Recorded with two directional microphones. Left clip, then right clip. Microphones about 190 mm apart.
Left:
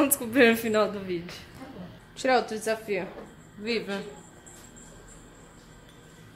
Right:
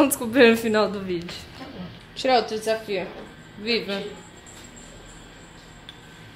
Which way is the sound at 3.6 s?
5° left (ahead or behind).